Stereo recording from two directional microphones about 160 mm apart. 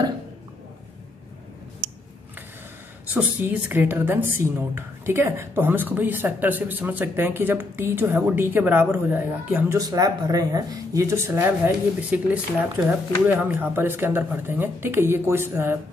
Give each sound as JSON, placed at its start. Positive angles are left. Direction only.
{"t": 3.1, "sound": "a woman's voice", "side_deg": -10}
{"t": 9.8, "sound": "a woman's voice", "side_deg": -20}